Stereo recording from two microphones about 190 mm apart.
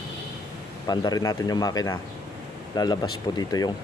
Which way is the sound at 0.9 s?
20° left (ahead or behind).